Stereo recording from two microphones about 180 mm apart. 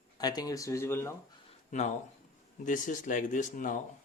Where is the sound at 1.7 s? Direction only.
40° left (ahead or behind).